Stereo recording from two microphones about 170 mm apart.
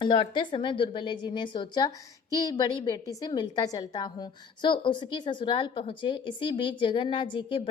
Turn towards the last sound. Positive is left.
turn(degrees=30)  # may be behind; listen again after turning